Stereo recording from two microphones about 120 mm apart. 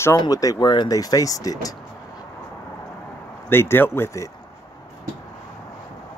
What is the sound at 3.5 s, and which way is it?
Speech, 20° left (ahead or behind).